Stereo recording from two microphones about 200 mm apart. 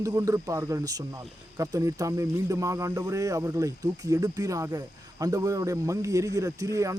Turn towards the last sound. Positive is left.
turn(degrees=-15)  # may be behind; listen again after turning